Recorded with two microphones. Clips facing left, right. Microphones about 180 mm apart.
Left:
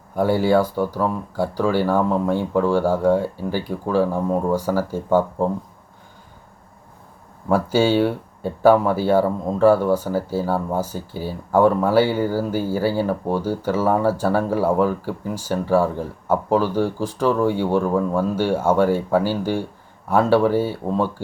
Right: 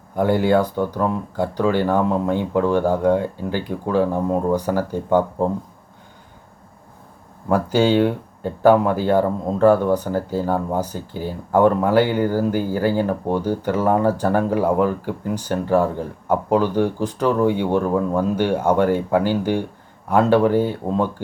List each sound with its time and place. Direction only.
0.2 s speech: 20° right (ahead or behind)
7.7 s speech: 15° right (ahead or behind)